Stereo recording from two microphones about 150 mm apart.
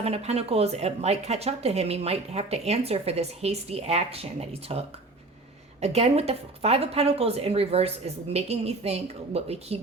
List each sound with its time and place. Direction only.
0.0 s speech: 45° right (ahead or behind)
5.8 s speech: 45° right (ahead or behind)